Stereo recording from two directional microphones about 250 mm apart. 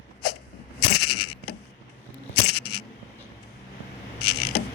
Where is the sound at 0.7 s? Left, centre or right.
Left.